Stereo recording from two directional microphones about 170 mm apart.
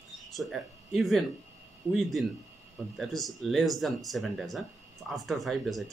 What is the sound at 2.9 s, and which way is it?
Speech, centre (ahead or behind).